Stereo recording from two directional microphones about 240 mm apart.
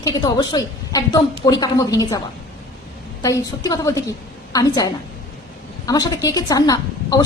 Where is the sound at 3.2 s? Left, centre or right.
Centre.